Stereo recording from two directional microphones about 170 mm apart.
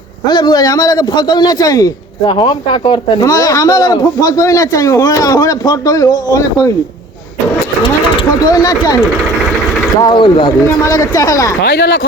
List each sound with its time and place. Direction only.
0.3 s a man's voice: 25° left (ahead or behind)
8.1 s a man's voice: 25° left (ahead or behind)
10.0 s a man's voice: 25° left (ahead or behind)
11.6 s speech: 80° left